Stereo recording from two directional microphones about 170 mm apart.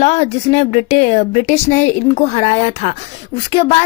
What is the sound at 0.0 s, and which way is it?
Speech, 40° left (ahead or behind).